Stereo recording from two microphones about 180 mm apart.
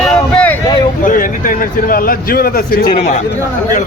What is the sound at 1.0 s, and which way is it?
A man's voice, 50° left (ahead or behind).